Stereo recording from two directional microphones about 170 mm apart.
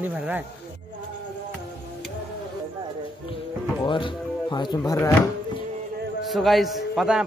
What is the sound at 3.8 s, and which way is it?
Speech, 30° left (ahead or behind).